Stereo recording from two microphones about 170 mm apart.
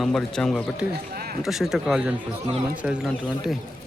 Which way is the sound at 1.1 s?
60° right (ahead or behind).